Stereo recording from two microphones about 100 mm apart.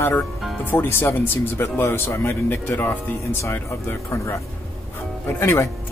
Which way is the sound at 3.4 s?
30° left (ahead or behind).